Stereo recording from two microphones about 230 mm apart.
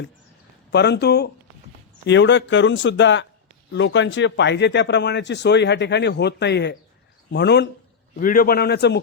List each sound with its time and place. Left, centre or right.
0.7 s a man's voice: left